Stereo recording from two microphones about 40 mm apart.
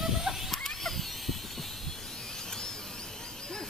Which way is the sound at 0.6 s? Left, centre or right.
Centre.